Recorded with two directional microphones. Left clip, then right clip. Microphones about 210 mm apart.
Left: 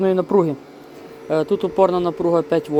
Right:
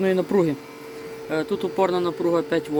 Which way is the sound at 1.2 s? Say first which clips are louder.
Left 6 dB; 15° left (ahead or behind).